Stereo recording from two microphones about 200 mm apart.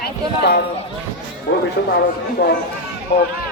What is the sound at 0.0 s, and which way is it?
Speech, 50° left (ahead or behind).